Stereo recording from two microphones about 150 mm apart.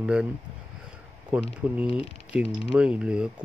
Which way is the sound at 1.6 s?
10° right (ahead or behind).